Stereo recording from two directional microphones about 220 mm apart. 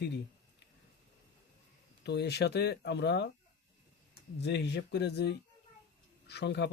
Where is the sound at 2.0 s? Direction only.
50° left (ahead or behind).